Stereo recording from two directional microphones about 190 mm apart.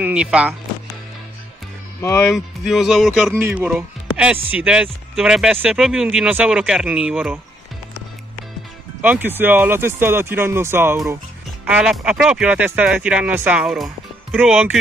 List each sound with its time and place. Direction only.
0.0 s speech: 5° right (ahead or behind)
2.0 s speech: 15° left (ahead or behind)
2.3 s speech: centre (ahead or behind)
9.0 s speech: 10° right (ahead or behind)